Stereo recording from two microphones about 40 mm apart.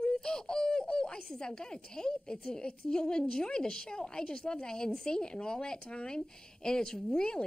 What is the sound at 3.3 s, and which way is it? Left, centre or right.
A woman's voice, centre.